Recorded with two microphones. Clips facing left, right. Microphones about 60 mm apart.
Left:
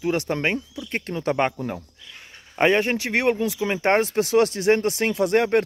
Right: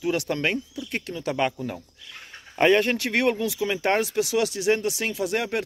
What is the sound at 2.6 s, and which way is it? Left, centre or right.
Speech, left.